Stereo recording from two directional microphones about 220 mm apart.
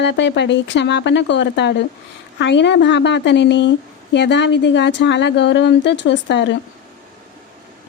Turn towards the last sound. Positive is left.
turn(degrees=55)  # may be behind; listen again after turning